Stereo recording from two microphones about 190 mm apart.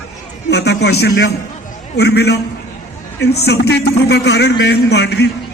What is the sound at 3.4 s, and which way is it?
A man's voice, 60° left (ahead or behind).